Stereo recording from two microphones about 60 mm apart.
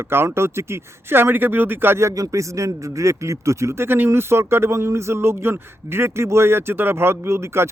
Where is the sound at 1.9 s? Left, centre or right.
Right.